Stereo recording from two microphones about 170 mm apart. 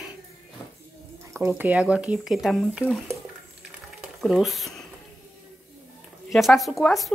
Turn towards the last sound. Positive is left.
turn(degrees=0)  # may be behind; listen again after turning